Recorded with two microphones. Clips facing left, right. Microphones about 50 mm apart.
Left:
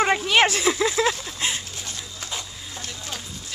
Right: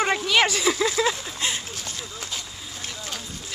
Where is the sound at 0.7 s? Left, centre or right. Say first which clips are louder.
Left 1 dB; centre.